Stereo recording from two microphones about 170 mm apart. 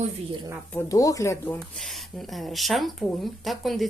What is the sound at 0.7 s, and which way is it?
Speech, 20° left (ahead or behind).